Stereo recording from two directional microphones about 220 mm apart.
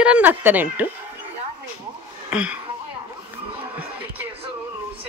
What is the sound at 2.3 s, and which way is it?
Speech, 5° right (ahead or behind).